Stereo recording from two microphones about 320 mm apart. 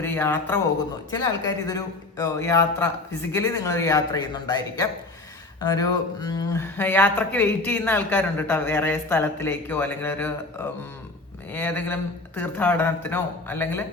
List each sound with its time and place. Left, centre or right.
0.0 s speech: centre
11.5 s speech: centre